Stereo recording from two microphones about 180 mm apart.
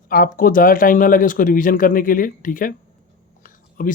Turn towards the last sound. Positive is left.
turn(degrees=50)  # may be behind; listen again after turning